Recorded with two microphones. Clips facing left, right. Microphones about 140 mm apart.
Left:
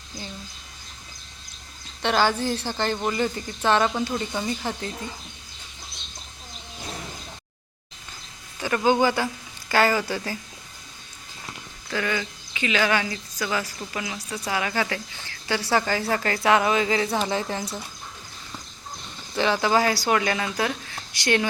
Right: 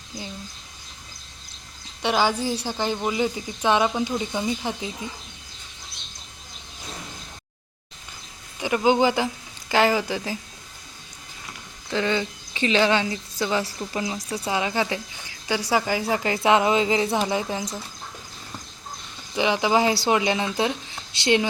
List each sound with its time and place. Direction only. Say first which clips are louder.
2.0 s speech: even; 10° right (ahead or behind)
8.5 s speech: right 1 dB; 15° right (ahead or behind)
11.9 s speech: right 3 dB; 25° right (ahead or behind)
19.3 s speech: right 1 dB; 15° right (ahead or behind)